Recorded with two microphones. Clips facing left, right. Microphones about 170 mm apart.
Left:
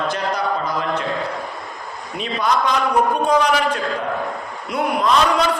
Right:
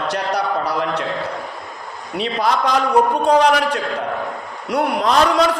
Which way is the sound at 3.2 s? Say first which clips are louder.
Right 3 dB; 75° right (ahead or behind).